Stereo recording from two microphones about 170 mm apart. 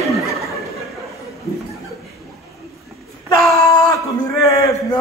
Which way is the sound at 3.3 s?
20° left (ahead or behind).